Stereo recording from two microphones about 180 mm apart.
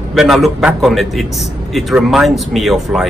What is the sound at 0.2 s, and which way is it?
A man's voice, centre (ahead or behind).